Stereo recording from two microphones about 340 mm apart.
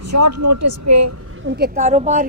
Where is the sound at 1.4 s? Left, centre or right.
Right.